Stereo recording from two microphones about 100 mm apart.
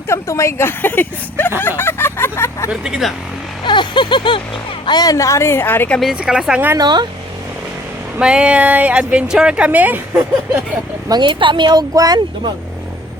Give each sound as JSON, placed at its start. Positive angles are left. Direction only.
{"t": 0.1, "sound": "speech", "side_deg": 30}
{"t": 2.8, "sound": "speech", "side_deg": -5}
{"t": 3.6, "sound": "a sound", "side_deg": 50}
{"t": 4.9, "sound": "speech", "side_deg": 40}
{"t": 6.0, "sound": "speech", "side_deg": -5}
{"t": 6.7, "sound": "speech", "side_deg": -45}
{"t": 8.2, "sound": "speech", "side_deg": -10}
{"t": 11.1, "sound": "speech", "side_deg": -50}